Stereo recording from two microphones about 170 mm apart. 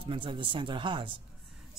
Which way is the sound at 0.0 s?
30° right (ahead or behind).